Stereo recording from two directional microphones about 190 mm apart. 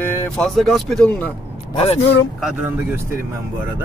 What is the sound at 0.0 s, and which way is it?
Speech, 10° left (ahead or behind).